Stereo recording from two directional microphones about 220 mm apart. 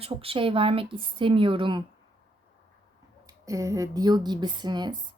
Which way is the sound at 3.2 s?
15° right (ahead or behind).